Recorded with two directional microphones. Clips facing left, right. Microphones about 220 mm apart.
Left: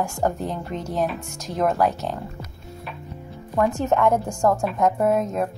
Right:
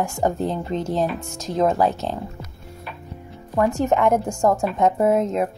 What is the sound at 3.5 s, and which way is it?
A woman's voice, 15° right (ahead or behind).